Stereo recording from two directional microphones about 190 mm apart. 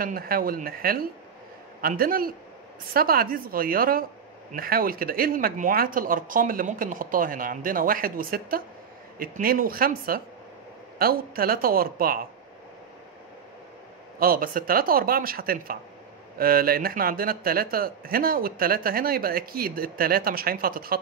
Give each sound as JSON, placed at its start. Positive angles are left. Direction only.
{"t": 0.0, "sound": "speech", "side_deg": -50}
{"t": 14.2, "sound": "speech", "side_deg": -50}